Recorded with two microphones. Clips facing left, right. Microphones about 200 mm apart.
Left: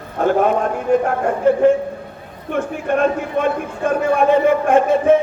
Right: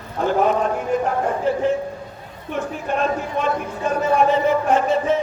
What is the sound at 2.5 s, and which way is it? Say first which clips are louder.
Battle cry: left 5 dB; 55° left (ahead or behind).